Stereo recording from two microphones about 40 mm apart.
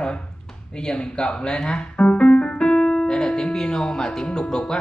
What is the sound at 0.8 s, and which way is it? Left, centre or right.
Speech, centre.